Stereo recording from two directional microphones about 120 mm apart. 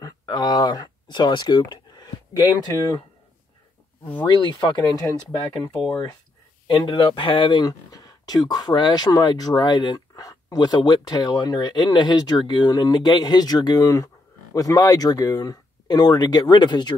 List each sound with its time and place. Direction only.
0.0 s speech: 35° left (ahead or behind)
4.3 s speech: 40° left (ahead or behind)
6.7 s speech: 45° left (ahead or behind)